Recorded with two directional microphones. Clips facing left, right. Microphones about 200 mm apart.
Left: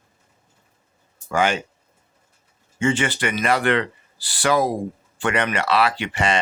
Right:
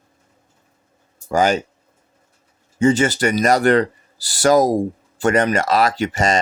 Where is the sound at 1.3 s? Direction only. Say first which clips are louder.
Right 4 dB; 40° right (ahead or behind).